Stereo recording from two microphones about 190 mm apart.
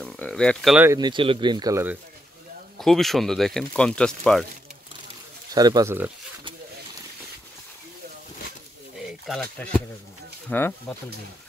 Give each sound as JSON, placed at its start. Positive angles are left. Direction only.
{"t": 0.0, "sound": "a sound", "side_deg": 5}
{"t": 0.9, "sound": "speech", "side_deg": -25}
{"t": 2.8, "sound": "speech", "side_deg": 0}
{"t": 5.5, "sound": "speech", "side_deg": -20}
{"t": 8.9, "sound": "a sound", "side_deg": 0}
{"t": 10.5, "sound": "speech", "side_deg": 10}